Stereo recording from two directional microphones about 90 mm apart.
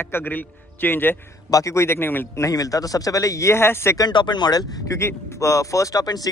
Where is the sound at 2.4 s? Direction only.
40° left (ahead or behind).